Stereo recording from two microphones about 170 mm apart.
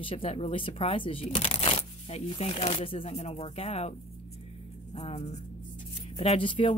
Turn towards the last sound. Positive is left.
turn(degrees=30)  # may be behind; listen again after turning